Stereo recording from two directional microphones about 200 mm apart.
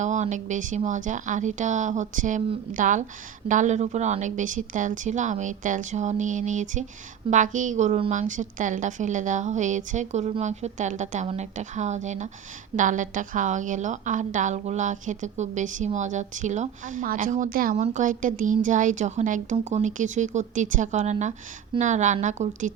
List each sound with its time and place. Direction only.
0.0 s a woman's voice: 35° right (ahead or behind)